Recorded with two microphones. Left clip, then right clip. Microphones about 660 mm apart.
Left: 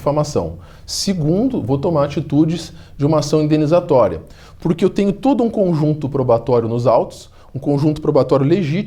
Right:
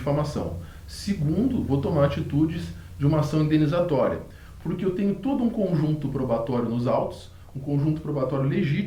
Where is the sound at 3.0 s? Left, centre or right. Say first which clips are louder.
Left 10 dB; left.